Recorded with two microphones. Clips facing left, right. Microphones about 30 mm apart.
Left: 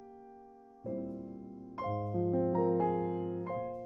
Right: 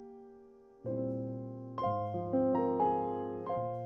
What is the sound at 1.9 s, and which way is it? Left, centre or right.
Music, centre.